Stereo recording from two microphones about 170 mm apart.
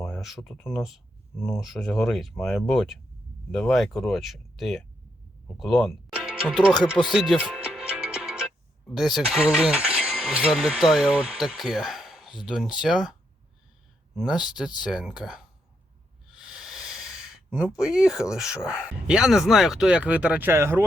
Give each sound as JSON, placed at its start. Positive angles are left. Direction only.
{"t": 0.0, "sound": "speech", "side_deg": 0}
{"t": 6.1, "sound": "music", "side_deg": -5}
{"t": 9.0, "sound": "speech", "side_deg": 0}
{"t": 14.4, "sound": "speech", "side_deg": -5}